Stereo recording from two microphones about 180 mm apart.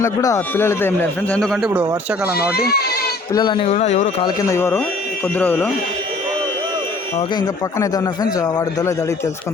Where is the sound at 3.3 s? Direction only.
25° left (ahead or behind).